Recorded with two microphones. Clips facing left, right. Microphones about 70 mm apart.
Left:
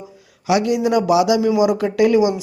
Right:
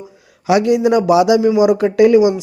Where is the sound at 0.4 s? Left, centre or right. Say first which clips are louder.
Right 4 dB; right.